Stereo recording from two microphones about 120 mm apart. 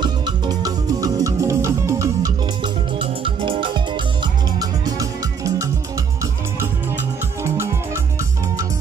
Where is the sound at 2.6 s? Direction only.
45° right (ahead or behind); by 5.7 s 25° right (ahead or behind).